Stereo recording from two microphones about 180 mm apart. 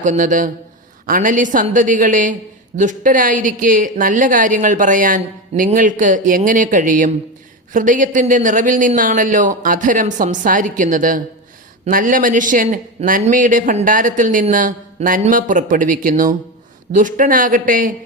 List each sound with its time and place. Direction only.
0.0 s a man's voice: 45° right (ahead or behind)